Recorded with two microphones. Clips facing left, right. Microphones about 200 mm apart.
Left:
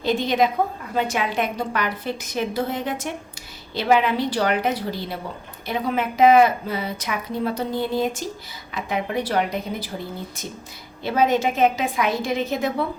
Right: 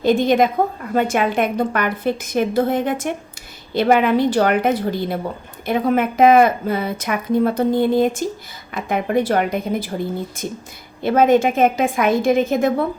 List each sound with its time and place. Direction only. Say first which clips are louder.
0.0 s speech: right 5 dB; 50° right (ahead or behind)